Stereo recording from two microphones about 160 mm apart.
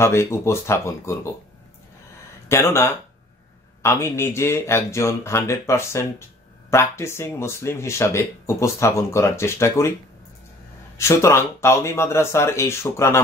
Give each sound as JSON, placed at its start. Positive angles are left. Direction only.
{"t": 0.0, "sound": "speech", "side_deg": 15}
{"t": 2.4, "sound": "speech", "side_deg": 15}
{"t": 11.0, "sound": "speech", "side_deg": 15}